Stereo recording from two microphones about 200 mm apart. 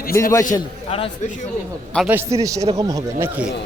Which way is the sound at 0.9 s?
30° left (ahead or behind).